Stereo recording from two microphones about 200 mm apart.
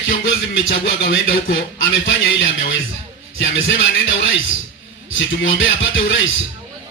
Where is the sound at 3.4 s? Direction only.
70° left (ahead or behind).